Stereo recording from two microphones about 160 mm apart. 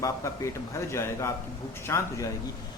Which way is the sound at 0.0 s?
20° left (ahead or behind).